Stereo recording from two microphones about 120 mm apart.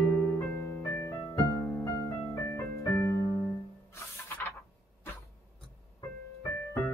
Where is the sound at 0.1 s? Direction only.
20° left (ahead or behind).